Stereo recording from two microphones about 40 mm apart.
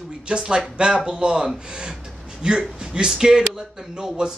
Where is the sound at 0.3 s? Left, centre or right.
Centre.